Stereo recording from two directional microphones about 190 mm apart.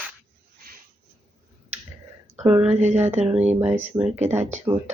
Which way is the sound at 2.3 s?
5° right (ahead or behind).